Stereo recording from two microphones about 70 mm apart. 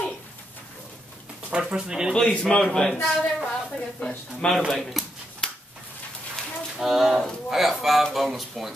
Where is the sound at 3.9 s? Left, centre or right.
Centre.